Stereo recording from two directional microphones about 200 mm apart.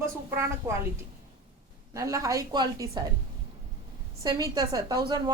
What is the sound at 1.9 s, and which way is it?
A woman's voice, 15° right (ahead or behind).